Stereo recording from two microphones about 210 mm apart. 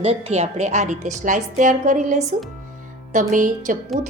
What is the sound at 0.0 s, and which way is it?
Speech, 30° right (ahead or behind).